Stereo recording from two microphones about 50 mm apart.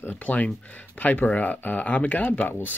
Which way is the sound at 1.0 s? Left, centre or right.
Left.